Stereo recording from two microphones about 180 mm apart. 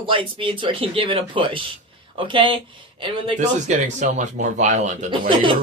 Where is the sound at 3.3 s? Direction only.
40° right (ahead or behind).